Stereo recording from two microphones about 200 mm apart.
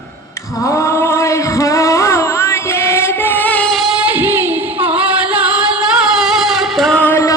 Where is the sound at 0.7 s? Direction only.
15° left (ahead or behind).